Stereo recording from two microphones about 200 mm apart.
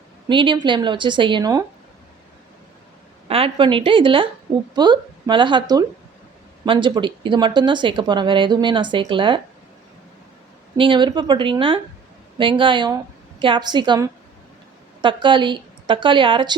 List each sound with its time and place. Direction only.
0.3 s speech: 25° right (ahead or behind)
3.2 s speech: 30° right (ahead or behind)
10.8 s speech: 25° right (ahead or behind)